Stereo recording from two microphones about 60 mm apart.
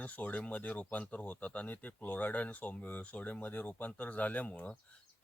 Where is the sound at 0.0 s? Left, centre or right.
Left.